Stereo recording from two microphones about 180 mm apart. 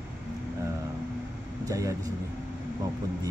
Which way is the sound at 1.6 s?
20° right (ahead or behind).